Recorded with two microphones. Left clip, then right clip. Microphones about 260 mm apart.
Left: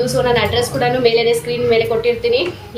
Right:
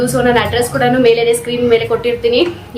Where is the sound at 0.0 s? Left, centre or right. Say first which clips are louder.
Right 2 dB; centre.